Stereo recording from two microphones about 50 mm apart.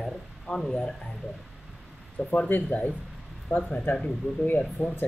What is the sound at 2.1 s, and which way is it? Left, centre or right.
Speech, left.